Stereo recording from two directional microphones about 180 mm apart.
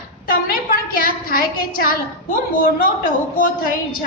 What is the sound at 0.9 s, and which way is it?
A woman's voice, 55° left (ahead or behind).